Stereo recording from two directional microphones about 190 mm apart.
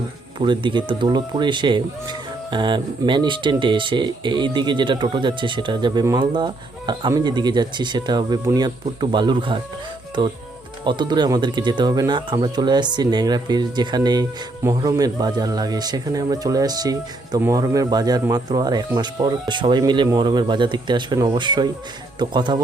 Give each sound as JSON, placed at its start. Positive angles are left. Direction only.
{"t": 0.3, "sound": "speech", "side_deg": -25}